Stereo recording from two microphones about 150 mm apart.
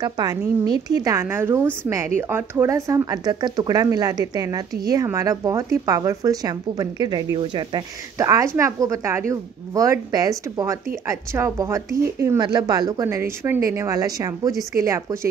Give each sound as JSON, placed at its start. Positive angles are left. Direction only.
{"t": 0.0, "sound": "speech", "side_deg": -25}